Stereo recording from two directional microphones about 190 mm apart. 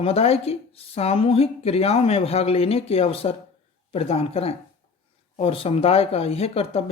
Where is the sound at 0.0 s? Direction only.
30° left (ahead or behind).